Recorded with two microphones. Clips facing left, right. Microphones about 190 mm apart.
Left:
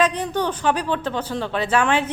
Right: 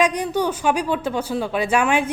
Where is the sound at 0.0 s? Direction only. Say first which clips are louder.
Right 1 dB; 10° right (ahead or behind).